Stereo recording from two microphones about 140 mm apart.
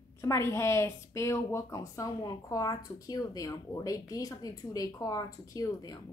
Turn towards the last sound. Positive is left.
turn(degrees=25)  # may be behind; listen again after turning